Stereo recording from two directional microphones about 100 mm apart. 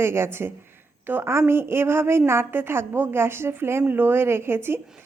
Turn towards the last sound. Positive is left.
turn(degrees=-25)  # may be behind; listen again after turning